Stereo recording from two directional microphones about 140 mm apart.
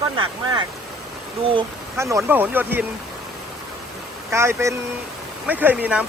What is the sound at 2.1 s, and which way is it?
Speech, 15° right (ahead or behind).